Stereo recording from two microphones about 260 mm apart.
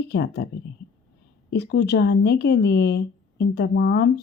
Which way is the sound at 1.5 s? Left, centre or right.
Left.